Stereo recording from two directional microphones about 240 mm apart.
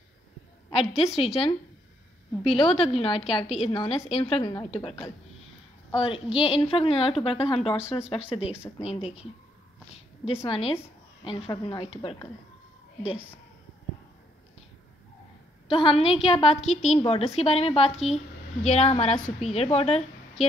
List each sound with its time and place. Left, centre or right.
0.7 s a woman's voice: left
5.9 s a woman's voice: left
15.7 s a woman's voice: left